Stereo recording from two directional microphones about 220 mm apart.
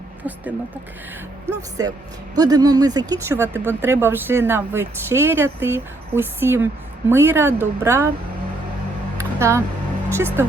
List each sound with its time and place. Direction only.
1.8 s speech: 15° right (ahead or behind)
9.1 s a sound: 15° right (ahead or behind)
10.1 s speech: 10° right (ahead or behind)